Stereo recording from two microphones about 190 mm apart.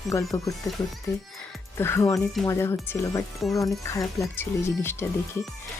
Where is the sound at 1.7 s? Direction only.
15° left (ahead or behind).